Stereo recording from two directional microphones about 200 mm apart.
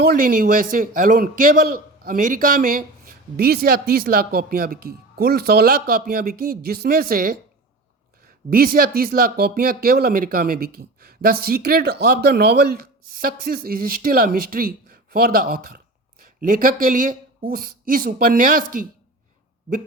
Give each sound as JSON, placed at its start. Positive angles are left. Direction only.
{"t": 0.1, "sound": "speech", "side_deg": -45}
{"t": 8.4, "sound": "speech", "side_deg": -45}